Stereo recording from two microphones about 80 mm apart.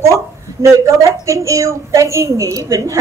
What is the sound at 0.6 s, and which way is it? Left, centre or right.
A woman's voice, right.